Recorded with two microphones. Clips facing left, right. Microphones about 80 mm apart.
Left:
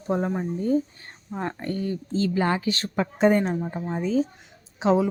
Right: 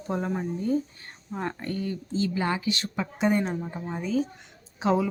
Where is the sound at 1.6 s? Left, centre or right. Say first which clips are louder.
Left 3 dB; left.